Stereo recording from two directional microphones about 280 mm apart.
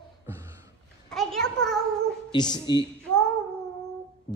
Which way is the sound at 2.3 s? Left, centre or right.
Centre.